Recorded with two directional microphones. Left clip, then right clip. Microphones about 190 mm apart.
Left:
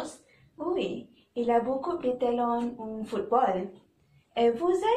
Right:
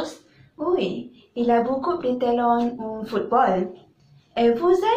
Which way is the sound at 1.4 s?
20° left (ahead or behind).